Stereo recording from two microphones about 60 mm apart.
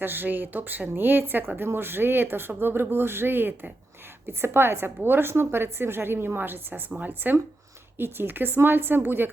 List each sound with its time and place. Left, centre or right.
0.0 s a woman's voice: right